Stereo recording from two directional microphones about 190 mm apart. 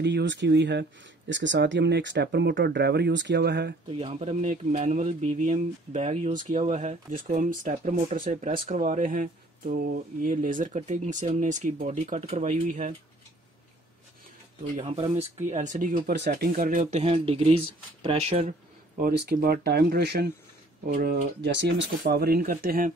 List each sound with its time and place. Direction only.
0.0 s speech: 70° right (ahead or behind)
3.9 s speech: 30° right (ahead or behind)
14.8 s speech: 30° right (ahead or behind)
16.1 s speech: 55° right (ahead or behind); by 18.5 s 30° right (ahead or behind)
18.9 s speech: 50° right (ahead or behind)